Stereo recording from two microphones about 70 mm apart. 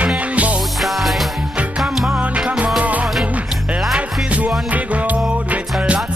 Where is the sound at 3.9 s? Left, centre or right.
Right.